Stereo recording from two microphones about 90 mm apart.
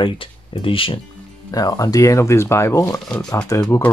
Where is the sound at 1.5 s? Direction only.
45° left (ahead or behind).